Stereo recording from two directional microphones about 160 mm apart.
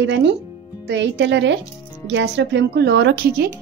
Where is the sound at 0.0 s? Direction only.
90° right.